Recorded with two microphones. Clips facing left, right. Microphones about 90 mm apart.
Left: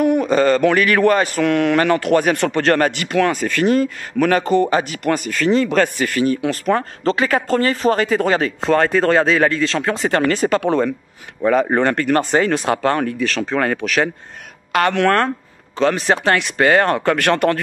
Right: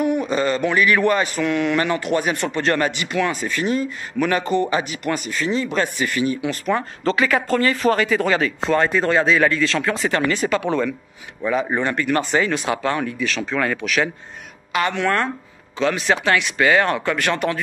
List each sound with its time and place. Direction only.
0.0 s a man's voice: 50° left (ahead or behind)
5.9 s speech: 45° left (ahead or behind)
11.4 s a man's voice: 50° left (ahead or behind)
14.7 s speech: 55° left (ahead or behind)
15.8 s a man's voice: 40° left (ahead or behind)